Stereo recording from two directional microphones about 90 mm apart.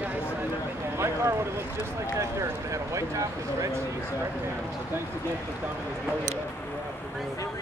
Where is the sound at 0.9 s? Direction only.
30° right (ahead or behind).